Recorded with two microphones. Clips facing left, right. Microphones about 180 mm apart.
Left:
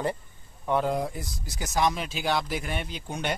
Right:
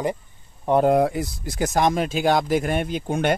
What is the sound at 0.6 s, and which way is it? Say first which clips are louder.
Speech: right 7 dB; 40° right (ahead or behind).